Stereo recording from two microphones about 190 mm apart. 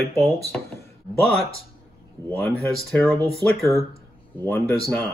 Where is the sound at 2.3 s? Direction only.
5° left (ahead or behind).